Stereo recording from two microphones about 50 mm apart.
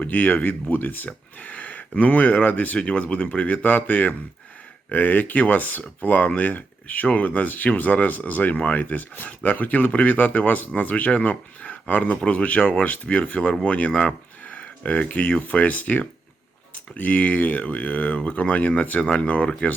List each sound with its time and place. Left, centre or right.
0.0 s speech: left